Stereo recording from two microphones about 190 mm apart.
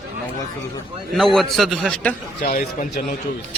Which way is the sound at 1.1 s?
Centre (ahead or behind).